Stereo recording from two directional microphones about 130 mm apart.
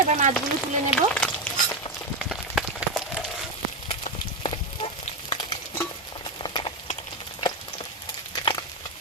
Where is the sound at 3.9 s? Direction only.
45° left (ahead or behind).